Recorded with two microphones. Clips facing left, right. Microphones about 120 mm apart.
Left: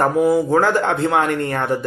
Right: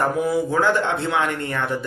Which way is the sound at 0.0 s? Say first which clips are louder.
Left 5 dB; 40° left (ahead or behind).